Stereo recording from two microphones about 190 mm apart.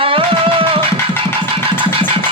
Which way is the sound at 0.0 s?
30° right (ahead or behind).